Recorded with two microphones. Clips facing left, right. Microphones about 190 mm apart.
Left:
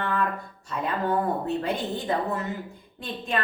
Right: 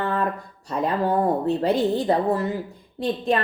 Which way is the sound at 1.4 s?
35° right (ahead or behind).